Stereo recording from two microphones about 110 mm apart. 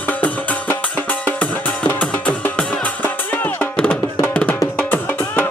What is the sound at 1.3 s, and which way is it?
Music, 15° left (ahead or behind).